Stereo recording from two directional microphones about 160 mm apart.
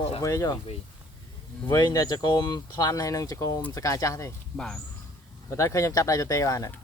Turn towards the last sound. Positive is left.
turn(degrees=20)  # may be behind; listen again after turning